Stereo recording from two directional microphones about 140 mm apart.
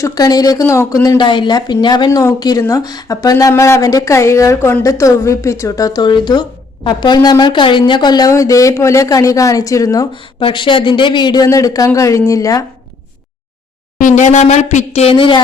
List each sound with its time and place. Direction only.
0.0 s speech: 25° left (ahead or behind)
10.4 s speech: 35° left (ahead or behind)
14.0 s a woman's voice: 55° left (ahead or behind); by 15.4 s 40° left (ahead or behind)